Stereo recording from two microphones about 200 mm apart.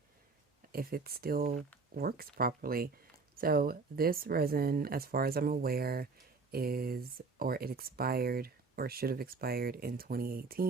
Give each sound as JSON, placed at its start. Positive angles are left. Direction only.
{"t": 0.7, "sound": "speech", "side_deg": -50}